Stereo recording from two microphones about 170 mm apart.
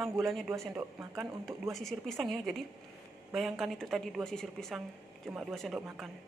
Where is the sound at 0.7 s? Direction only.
15° right (ahead or behind).